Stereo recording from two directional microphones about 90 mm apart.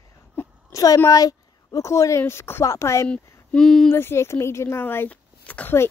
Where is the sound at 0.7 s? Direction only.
35° left (ahead or behind).